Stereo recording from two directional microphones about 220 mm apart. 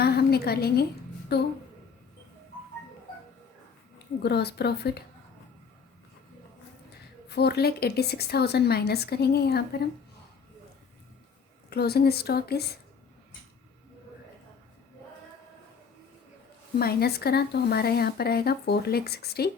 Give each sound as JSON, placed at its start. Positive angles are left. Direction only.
{"t": 0.0, "sound": "a sound", "side_deg": 45}
{"t": 1.3, "sound": "speech", "side_deg": 50}
{"t": 3.9, "sound": "speech", "side_deg": 50}
{"t": 7.3, "sound": "speech", "side_deg": 45}
{"t": 11.7, "sound": "speech", "side_deg": 45}
{"t": 16.7, "sound": "speech", "side_deg": 45}